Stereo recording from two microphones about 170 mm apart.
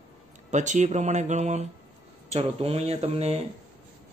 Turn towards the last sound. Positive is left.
turn(degrees=-35)  # may be behind; listen again after turning